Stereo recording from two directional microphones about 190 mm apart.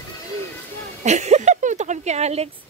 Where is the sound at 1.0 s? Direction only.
35° right (ahead or behind).